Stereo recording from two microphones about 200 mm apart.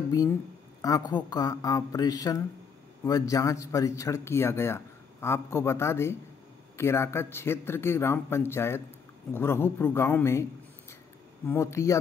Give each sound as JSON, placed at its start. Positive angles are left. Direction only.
{"t": 0.8, "sound": "speech", "side_deg": 15}
{"t": 11.4, "sound": "speech", "side_deg": 15}